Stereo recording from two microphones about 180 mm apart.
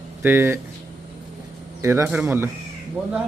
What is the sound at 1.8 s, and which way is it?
Speech, 15° right (ahead or behind).